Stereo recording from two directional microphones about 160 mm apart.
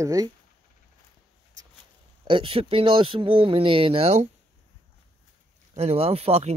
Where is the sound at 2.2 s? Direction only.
35° right (ahead or behind).